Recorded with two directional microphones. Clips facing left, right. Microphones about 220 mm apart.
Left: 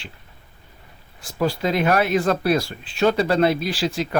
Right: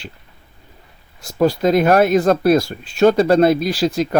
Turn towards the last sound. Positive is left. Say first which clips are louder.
# right 6 dB
turn(degrees=-40)  # may be behind; listen again after turning